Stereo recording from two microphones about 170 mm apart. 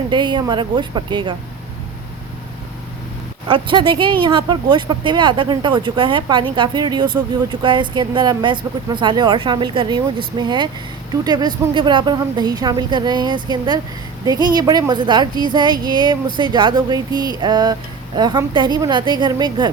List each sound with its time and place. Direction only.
0.1 s speech: 25° right (ahead or behind)
3.5 s speech: 30° right (ahead or behind)